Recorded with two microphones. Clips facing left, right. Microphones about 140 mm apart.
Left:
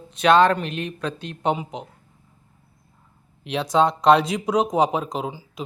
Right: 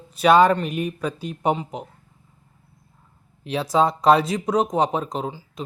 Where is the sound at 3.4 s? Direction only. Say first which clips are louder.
Even; centre (ahead or behind).